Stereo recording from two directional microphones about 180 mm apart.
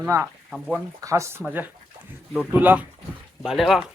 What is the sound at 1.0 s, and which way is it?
Speech, 15° right (ahead or behind).